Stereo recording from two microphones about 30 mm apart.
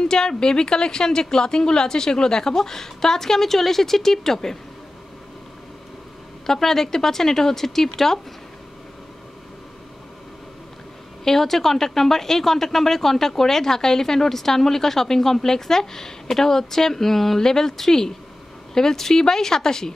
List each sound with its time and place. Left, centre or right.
0.0 s a woman's voice: left
6.4 s speech: centre
11.2 s speech: centre